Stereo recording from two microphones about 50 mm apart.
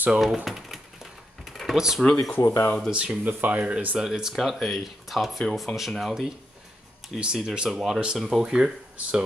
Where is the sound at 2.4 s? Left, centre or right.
Left.